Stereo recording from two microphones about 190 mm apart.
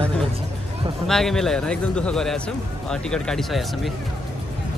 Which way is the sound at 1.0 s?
Centre (ahead or behind).